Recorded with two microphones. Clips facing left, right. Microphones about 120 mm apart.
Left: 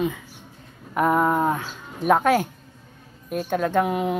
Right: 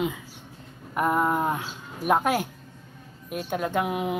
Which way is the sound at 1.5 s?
5° right (ahead or behind).